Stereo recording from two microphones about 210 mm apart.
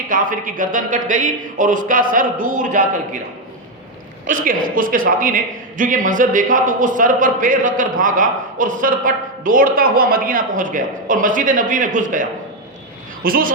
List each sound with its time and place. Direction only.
0.1 s a man's voice: 40° right (ahead or behind)
4.3 s a man's voice: 40° right (ahead or behind)